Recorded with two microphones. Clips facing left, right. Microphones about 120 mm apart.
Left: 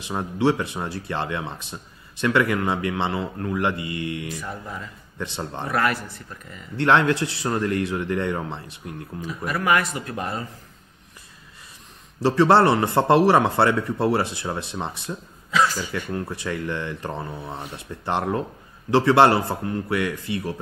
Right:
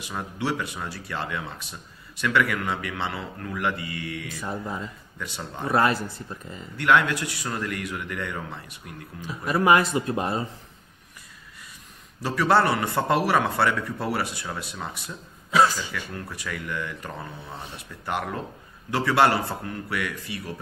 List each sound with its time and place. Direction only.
0.0 s speech: 25° left (ahead or behind)
4.4 s speech: 25° right (ahead or behind)
5.2 s speech: 25° left (ahead or behind)
5.7 s speech: 25° right (ahead or behind)
6.8 s speech: 25° left (ahead or behind)
9.2 s speech: 25° right (ahead or behind)
12.2 s speech: 25° left (ahead or behind)